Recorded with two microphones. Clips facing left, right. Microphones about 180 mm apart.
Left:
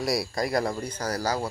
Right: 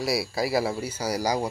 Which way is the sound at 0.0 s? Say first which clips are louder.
Right 1 dB; 5° right (ahead or behind).